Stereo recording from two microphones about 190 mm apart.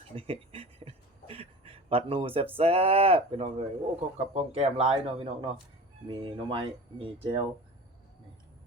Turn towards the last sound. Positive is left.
turn(degrees=-25)  # may be behind; listen again after turning